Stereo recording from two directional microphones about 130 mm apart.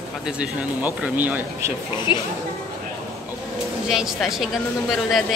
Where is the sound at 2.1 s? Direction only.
35° left (ahead or behind).